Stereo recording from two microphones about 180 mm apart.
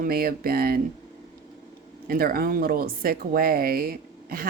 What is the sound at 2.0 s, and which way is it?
Speech, 55° right (ahead or behind).